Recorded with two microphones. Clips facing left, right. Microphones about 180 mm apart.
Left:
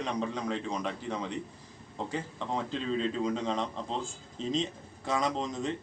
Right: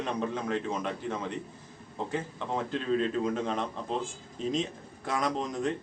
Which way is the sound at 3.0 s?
5° right (ahead or behind).